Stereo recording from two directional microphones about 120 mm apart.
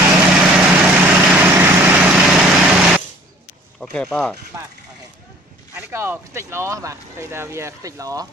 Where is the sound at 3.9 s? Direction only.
5° left (ahead or behind).